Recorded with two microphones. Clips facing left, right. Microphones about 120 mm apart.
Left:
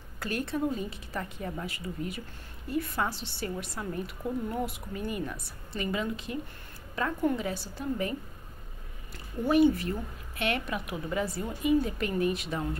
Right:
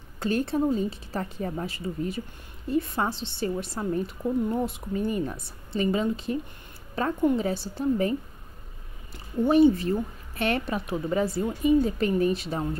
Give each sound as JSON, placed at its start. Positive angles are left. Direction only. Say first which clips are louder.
{"t": 0.2, "sound": "a woman's voice", "louder": "right 6 dB", "side_deg": -30}